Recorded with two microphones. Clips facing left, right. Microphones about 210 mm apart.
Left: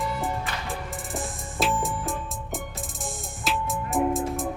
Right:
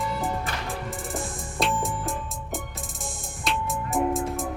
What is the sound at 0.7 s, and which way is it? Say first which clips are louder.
Music: right 1 dB; centre (ahead or behind).